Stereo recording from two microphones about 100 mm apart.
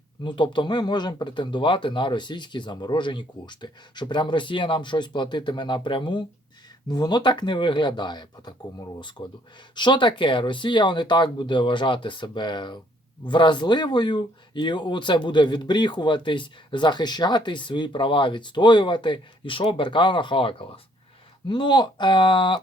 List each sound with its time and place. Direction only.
0.3 s speech: 55° left (ahead or behind)
6.8 s speech: 40° left (ahead or behind)